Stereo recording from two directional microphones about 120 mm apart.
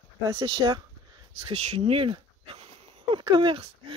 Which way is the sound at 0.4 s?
45° right (ahead or behind).